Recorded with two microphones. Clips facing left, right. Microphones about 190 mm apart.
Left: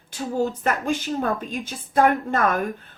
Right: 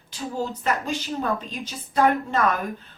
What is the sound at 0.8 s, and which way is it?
Speech, 50° left (ahead or behind).